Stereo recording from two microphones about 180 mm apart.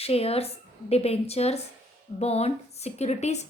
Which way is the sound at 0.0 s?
35° left (ahead or behind).